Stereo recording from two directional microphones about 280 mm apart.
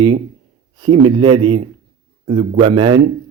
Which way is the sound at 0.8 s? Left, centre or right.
Centre.